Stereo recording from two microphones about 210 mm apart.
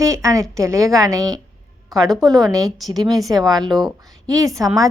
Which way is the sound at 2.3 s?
15° right (ahead or behind).